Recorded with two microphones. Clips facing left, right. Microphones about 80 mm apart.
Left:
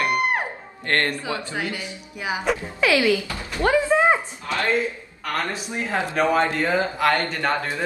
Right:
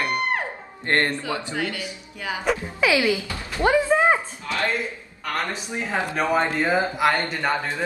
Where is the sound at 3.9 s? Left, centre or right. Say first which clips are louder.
Left 1 dB; centre.